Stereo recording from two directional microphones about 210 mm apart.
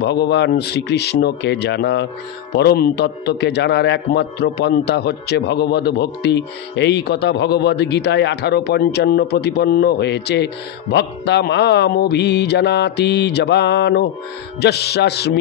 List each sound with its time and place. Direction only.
0.0 s a man's voice: 55° left (ahead or behind)